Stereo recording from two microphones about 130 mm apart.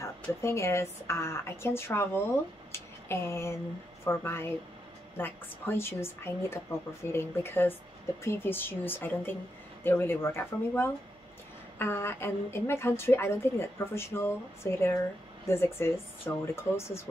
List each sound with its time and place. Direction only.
0.0 s a woman's voice: 20° left (ahead or behind)
2.7 s a sound: 20° left (ahead or behind)
4.0 s a woman's voice: 20° left (ahead or behind)